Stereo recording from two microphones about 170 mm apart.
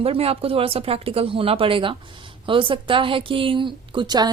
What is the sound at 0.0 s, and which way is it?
A woman's voice, 35° right (ahead or behind).